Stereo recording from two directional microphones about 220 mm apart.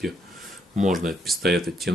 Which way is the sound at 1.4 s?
45° right (ahead or behind).